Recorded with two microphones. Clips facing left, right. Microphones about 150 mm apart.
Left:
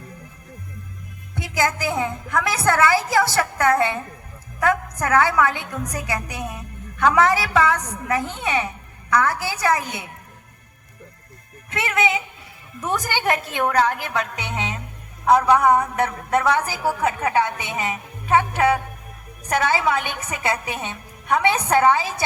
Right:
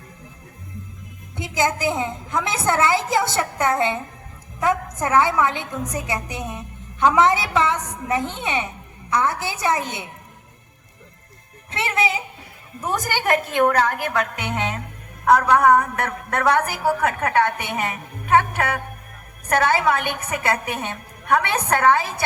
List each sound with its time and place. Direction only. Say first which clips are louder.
1.4 s a woman's voice: right 1 dB; 20° right (ahead or behind)
11.7 s speech: left 1 dB; 30° right (ahead or behind)
12.9 s a woman's voice: right 1 dB; 45° right (ahead or behind)